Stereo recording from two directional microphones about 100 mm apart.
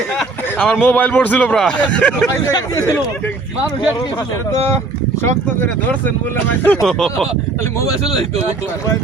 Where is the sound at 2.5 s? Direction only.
25° left (ahead or behind).